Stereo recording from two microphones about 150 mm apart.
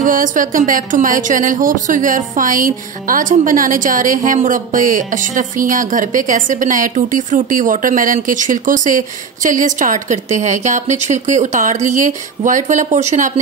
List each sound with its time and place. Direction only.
0.0 s speech: 60° right (ahead or behind)